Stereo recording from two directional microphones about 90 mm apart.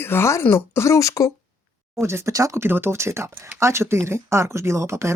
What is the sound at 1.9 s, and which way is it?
Speech, 30° right (ahead or behind).